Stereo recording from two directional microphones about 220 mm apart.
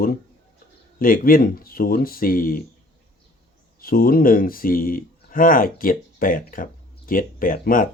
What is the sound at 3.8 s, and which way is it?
Speech, 40° left (ahead or behind).